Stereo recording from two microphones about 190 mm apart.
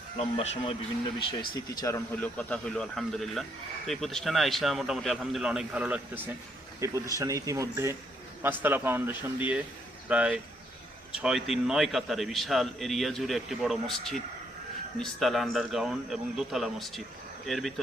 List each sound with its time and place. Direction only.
0.2 s speech: 35° left (ahead or behind)
1.5 s a man's voice: 20° left (ahead or behind); by 17.7 s centre (ahead or behind)